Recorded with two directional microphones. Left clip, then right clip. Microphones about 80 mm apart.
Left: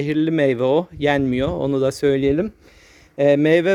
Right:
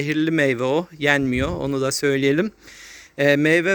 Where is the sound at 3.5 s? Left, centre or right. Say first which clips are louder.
Left 2 dB; left.